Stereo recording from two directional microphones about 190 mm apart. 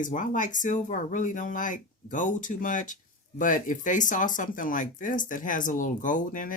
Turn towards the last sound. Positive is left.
turn(degrees=45)  # may be behind; listen again after turning